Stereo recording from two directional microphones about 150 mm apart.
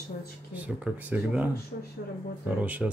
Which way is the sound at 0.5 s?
10° right (ahead or behind).